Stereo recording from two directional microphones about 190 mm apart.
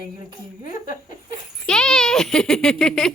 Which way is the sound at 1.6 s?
5° left (ahead or behind).